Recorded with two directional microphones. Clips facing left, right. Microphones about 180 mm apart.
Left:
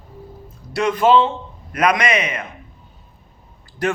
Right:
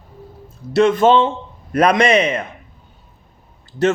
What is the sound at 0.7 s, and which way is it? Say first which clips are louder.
A man's voice: right 3 dB; 25° right (ahead or behind).